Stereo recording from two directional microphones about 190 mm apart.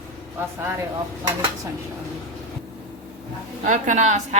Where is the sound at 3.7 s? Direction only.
40° right (ahead or behind).